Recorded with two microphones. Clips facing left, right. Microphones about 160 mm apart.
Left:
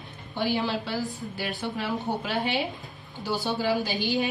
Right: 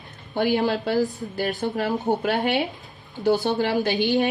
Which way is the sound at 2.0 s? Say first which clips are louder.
Right 6 dB; 55° right (ahead or behind).